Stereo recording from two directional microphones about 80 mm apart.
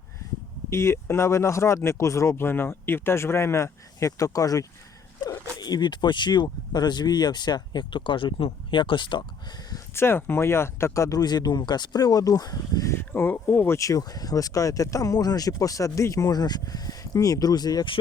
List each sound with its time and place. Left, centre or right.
0.7 s speech: left
2.3 s speech: left
5.2 s speech: left
9.9 s speech: left
11.2 s speech: left
12.9 s speech: left